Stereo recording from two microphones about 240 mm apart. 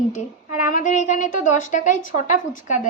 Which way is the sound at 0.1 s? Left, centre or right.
Left.